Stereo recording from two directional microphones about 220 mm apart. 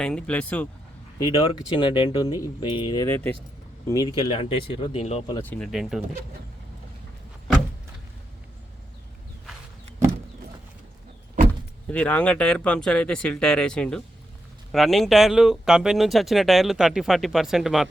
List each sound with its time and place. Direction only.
0.0 s speech: 5° left (ahead or behind)
1.2 s speech: 15° left (ahead or behind)
5.4 s speech: 5° left (ahead or behind)
11.9 s speech: 5° left (ahead or behind)